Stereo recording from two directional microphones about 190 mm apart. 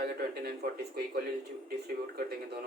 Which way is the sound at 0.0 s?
55° right (ahead or behind).